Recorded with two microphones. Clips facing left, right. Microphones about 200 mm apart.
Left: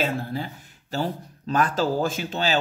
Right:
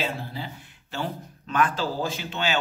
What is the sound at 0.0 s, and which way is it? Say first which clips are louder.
Speech: left 5 dB; 45° left (ahead or behind).